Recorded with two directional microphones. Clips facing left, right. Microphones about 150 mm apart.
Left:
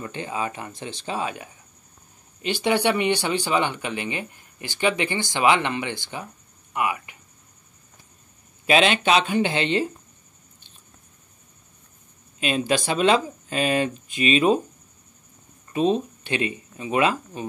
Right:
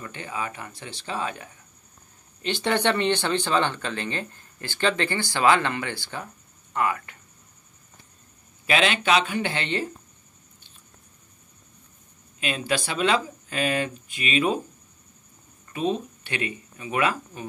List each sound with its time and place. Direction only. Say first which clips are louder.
0.0 s speech: left 4 dB; 20° left (ahead or behind)
8.6 s speech: left 3 dB; 20° left (ahead or behind)
12.4 s speech: left 4 dB; 20° left (ahead or behind)
15.7 s speech: left 5 dB; 25° left (ahead or behind)